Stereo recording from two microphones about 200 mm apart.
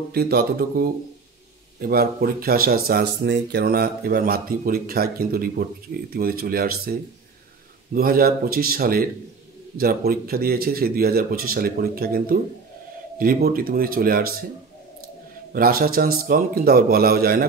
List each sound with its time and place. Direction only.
0.1 s speech: 50° right (ahead or behind)
15.5 s speech: 50° right (ahead or behind)